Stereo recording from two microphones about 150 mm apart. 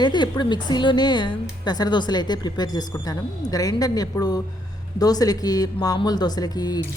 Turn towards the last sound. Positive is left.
turn(degrees=25)  # may be behind; listen again after turning